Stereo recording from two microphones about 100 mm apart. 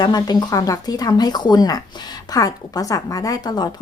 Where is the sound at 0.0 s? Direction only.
45° left (ahead or behind).